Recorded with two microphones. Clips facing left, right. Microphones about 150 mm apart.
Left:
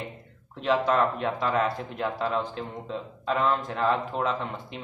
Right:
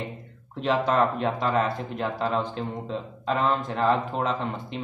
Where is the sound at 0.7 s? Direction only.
30° right (ahead or behind).